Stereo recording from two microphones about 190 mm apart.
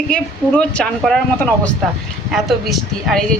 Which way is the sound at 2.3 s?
Centre (ahead or behind).